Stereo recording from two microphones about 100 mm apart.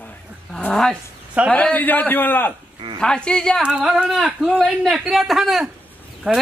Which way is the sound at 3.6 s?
5° right (ahead or behind).